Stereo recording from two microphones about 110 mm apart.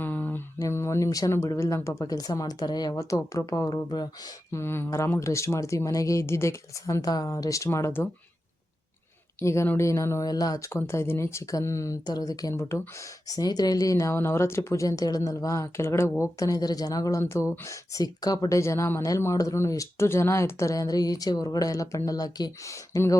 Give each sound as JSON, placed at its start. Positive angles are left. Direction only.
{"t": 0.0, "sound": "mantra", "side_deg": 15}
{"t": 0.6, "sound": "speech", "side_deg": 25}
{"t": 3.8, "sound": "speech", "side_deg": 40}
{"t": 4.5, "sound": "speech", "side_deg": 20}
{"t": 9.4, "sound": "speech", "side_deg": 25}
{"t": 12.0, "sound": "speech", "side_deg": 35}
{"t": 13.2, "sound": "speech", "side_deg": 35}